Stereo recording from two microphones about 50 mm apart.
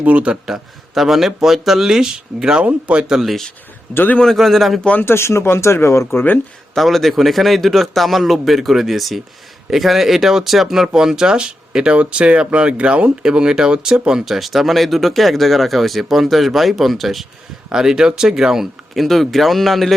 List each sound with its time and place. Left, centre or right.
0.0 s a man's voice: right
0.4 s speech: centre
3.2 s speech: centre
3.9 s a man's voice: left
4.4 s speech: centre
5.0 s speech: left
6.1 s a man's voice: left
6.7 s speech: centre
17.7 s speech: centre
18.9 s speech: centre